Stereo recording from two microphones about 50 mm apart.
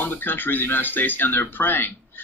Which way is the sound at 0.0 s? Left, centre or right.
Left.